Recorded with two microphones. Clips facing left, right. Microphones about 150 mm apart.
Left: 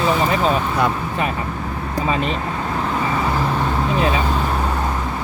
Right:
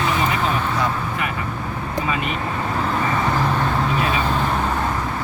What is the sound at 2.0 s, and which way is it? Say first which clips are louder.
Speech: left 5 dB; 30° left (ahead or behind).